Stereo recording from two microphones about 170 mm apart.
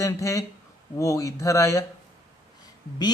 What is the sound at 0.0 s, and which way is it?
Speech, 20° left (ahead or behind).